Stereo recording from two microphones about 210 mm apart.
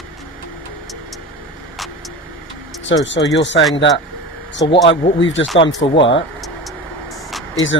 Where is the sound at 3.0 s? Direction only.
60° left (ahead or behind).